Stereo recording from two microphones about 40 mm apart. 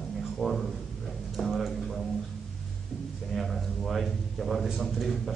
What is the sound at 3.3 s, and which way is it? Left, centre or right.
A man's voice, centre.